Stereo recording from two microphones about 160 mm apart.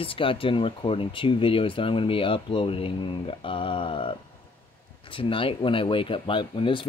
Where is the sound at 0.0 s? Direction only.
35° left (ahead or behind).